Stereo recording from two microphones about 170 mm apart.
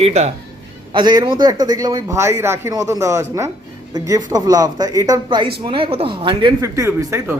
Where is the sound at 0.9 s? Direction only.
25° right (ahead or behind).